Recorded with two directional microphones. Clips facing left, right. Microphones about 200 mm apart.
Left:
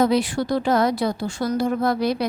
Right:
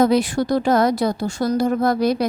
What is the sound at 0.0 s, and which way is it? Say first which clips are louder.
A woman's voice: right 3 dB; 45° right (ahead or behind).